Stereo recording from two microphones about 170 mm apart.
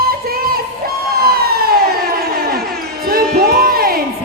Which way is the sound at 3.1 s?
60° right (ahead or behind).